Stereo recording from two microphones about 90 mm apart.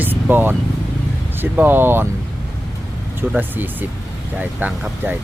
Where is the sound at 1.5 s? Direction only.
20° right (ahead or behind).